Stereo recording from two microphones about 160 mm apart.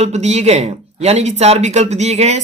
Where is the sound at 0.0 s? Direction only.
45° right (ahead or behind).